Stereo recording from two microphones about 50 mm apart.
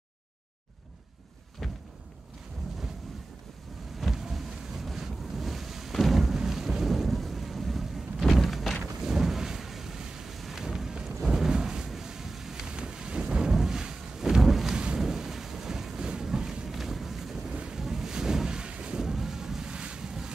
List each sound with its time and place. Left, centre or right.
1.6 s a sound: centre
4.0 s boat: centre
8.3 s a sound: centre
15.0 s thunder: centre
17.6 s wind noise: centre
18.9 s boat: centre